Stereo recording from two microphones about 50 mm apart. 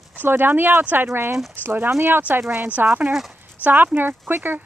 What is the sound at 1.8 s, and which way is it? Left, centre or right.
Speech, right.